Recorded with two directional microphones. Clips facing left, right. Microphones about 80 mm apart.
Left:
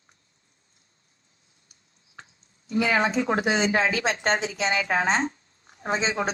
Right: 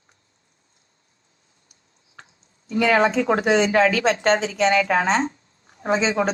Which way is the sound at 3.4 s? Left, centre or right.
Right.